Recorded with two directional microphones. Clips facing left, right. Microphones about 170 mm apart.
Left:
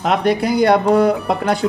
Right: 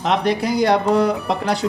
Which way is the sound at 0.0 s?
60° left (ahead or behind).